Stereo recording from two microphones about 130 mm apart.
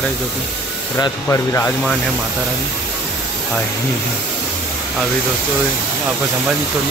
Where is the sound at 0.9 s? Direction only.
25° left (ahead or behind).